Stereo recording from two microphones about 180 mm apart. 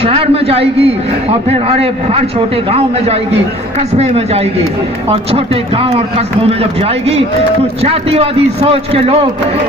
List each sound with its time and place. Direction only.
0.0 s a man's voice: 30° right (ahead or behind)